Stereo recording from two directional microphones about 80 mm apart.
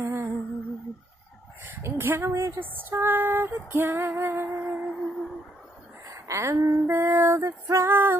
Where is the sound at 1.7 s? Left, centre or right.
Right.